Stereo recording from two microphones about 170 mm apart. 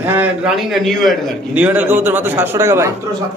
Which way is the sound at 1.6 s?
10° right (ahead or behind).